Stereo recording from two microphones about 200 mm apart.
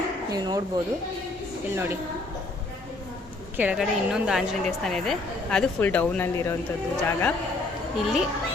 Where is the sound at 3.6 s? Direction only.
5° right (ahead or behind); by 6.5 s 10° left (ahead or behind).